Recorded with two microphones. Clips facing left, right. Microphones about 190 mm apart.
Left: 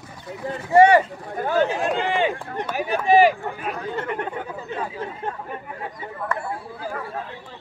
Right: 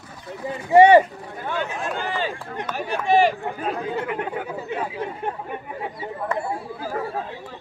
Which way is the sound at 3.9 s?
10° right (ahead or behind).